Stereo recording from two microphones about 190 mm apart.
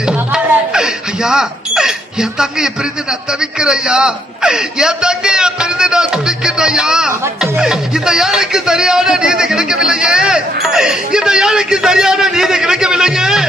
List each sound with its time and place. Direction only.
0.1 s a sound: 5° right (ahead or behind)
3.1 s a child's voice: 5° right (ahead or behind)
7.6 s speech: 5° right (ahead or behind)